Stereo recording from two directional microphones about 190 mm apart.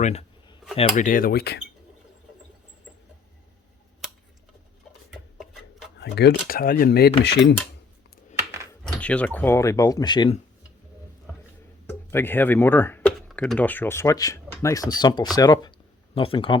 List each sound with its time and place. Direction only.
0.0 s a sound: 35° left (ahead or behind)
0.8 s speech: 40° left (ahead or behind)
6.0 s speech: 60° left (ahead or behind)
8.8 s speech: 5° left (ahead or behind); by 10.3 s 25° left (ahead or behind)
11.9 s speech: 10° left (ahead or behind); by 16.6 s 25° left (ahead or behind)